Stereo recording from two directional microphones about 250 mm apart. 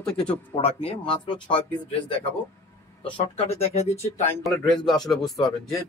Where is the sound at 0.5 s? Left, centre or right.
Left.